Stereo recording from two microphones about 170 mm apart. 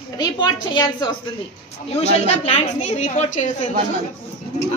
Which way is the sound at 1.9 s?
40° left (ahead or behind).